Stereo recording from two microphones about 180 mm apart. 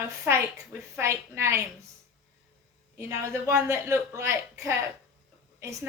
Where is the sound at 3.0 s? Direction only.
15° right (ahead or behind).